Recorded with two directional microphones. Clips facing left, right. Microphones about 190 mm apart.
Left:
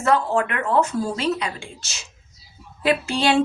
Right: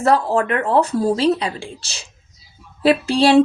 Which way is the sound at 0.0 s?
35° right (ahead or behind).